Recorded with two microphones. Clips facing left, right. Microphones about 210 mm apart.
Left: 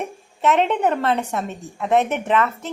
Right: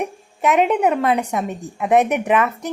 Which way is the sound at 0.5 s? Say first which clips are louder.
Right 4 dB; 10° right (ahead or behind).